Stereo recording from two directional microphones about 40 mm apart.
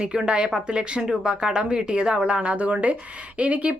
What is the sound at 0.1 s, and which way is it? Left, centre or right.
Speech, right.